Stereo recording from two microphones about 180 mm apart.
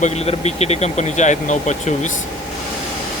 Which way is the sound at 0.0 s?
35° left (ahead or behind).